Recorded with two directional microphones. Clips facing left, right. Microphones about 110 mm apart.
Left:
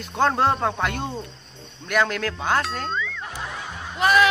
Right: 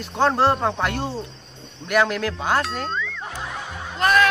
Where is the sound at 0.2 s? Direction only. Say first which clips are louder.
Right 1 dB; centre (ahead or behind).